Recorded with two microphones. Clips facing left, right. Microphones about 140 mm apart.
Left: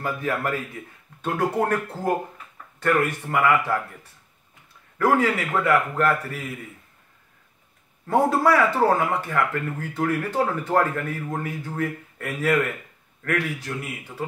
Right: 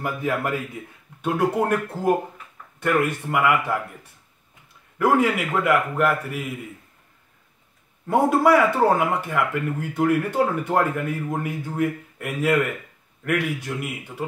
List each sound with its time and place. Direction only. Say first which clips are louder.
0.3 s speech: right 2 dB; 10° right (ahead or behind)
4.9 s a man's voice: right 1 dB; 15° right (ahead or behind)
8.1 s speech: right 2 dB; 15° right (ahead or behind)